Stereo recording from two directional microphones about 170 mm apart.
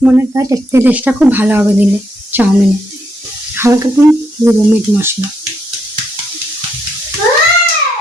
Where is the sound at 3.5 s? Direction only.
15° right (ahead or behind).